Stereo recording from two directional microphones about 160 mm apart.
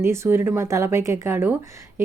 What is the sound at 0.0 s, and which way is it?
Speech, 15° right (ahead or behind).